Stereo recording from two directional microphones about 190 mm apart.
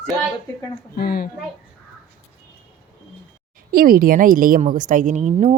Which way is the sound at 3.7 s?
50° right (ahead or behind).